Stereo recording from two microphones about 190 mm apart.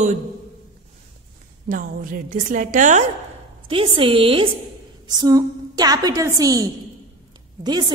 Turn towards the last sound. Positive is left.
turn(degrees=-20)  # may be behind; listen again after turning